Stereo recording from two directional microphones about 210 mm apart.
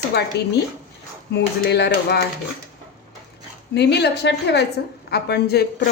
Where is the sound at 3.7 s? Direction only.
55° left (ahead or behind).